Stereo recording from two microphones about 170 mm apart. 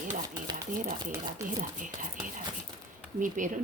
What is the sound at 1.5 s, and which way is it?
Speech, 50° right (ahead or behind).